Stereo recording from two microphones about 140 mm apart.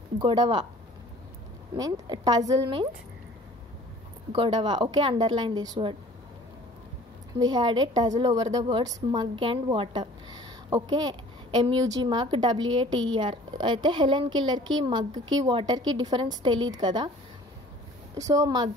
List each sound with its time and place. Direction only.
0.2 s a woman's voice: 35° right (ahead or behind)
1.8 s a woman's voice: 30° right (ahead or behind)
4.3 s a woman's voice: 35° right (ahead or behind)
7.3 s a woman's voice: 30° right (ahead or behind)
18.1 s a woman's voice: 25° right (ahead or behind)